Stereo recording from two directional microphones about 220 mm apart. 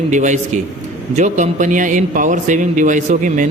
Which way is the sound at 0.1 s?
35° right (ahead or behind).